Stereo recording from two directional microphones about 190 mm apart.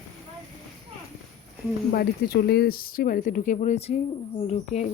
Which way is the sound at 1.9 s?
55° left (ahead or behind).